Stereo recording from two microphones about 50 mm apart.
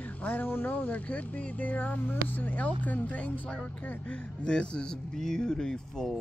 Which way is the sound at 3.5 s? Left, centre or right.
Left.